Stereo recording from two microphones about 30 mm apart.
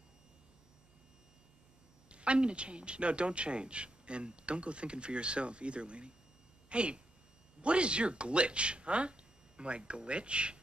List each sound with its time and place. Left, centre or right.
2.0 s a woman's voice: right